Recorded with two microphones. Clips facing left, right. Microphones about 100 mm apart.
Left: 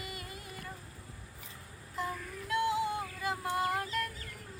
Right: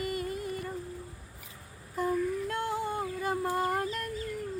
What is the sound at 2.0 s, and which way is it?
Child singing, 45° right (ahead or behind).